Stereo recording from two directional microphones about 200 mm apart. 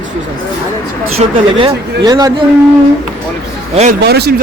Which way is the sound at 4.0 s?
55° right (ahead or behind).